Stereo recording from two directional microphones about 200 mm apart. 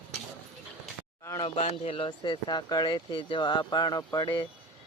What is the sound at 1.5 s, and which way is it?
Speech, 30° left (ahead or behind).